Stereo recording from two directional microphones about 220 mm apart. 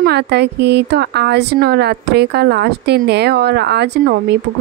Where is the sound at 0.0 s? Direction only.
50° right (ahead or behind).